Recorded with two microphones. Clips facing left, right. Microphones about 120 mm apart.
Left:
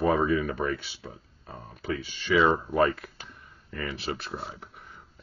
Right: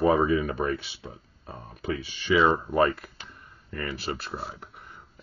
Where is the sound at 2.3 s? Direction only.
5° right (ahead or behind).